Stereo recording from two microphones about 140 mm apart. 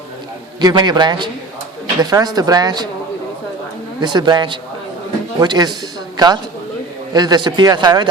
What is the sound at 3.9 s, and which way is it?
A man's voice, 30° right (ahead or behind).